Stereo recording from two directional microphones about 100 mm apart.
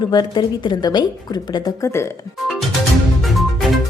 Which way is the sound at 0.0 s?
45° left (ahead or behind).